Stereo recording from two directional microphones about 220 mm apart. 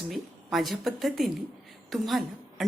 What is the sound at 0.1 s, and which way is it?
A woman's voice, centre (ahead or behind).